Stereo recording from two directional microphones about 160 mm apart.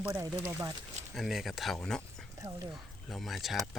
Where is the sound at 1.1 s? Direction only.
Centre (ahead or behind).